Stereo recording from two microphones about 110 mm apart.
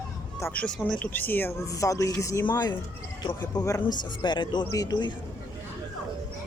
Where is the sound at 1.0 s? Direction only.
15° left (ahead or behind).